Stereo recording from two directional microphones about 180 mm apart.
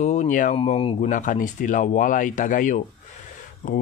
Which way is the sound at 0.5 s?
30° left (ahead or behind).